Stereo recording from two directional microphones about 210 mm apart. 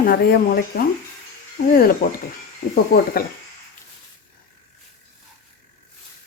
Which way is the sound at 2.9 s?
45° left (ahead or behind).